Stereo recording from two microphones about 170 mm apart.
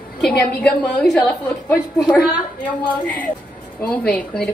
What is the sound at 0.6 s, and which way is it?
A woman's voice, 5° left (ahead or behind).